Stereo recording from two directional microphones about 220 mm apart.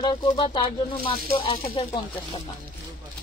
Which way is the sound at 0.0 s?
20° left (ahead or behind).